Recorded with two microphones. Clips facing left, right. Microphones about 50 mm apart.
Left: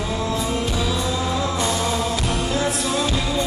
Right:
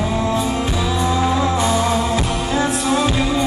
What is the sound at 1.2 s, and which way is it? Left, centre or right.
Music, right.